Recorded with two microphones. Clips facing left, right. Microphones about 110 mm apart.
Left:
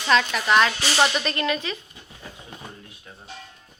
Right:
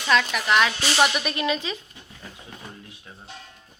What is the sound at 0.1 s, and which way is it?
Speech, 5° right (ahead or behind).